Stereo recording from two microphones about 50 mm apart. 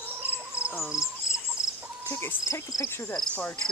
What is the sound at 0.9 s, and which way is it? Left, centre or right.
Cricket, centre.